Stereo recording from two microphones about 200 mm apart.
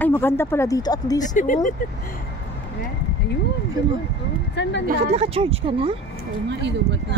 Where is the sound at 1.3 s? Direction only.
40° left (ahead or behind).